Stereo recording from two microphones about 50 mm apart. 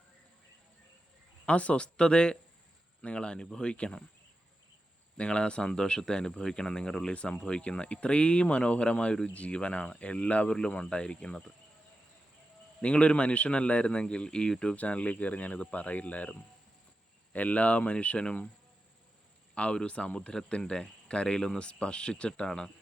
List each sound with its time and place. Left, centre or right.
1.5 s speech: left
5.1 s speech: centre
12.8 s speech: left
17.3 s speech: left
19.5 s speech: left